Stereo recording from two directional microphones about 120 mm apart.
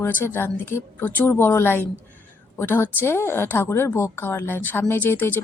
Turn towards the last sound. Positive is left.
turn(degrees=15)  # may be behind; listen again after turning